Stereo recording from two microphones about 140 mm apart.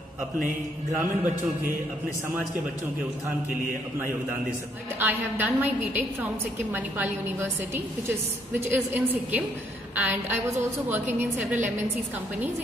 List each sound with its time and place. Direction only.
4.9 s a woman's voice: 15° right (ahead or behind)
11.5 s a woman's voice: 60° right (ahead or behind)